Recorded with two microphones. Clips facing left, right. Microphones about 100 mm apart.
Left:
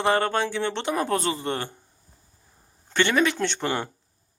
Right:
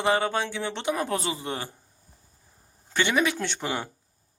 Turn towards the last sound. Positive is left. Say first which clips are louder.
# left 4 dB
turn(degrees=-5)  # may be behind; listen again after turning